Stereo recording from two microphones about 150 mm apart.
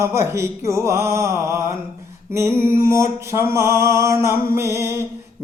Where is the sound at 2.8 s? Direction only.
20° right (ahead or behind).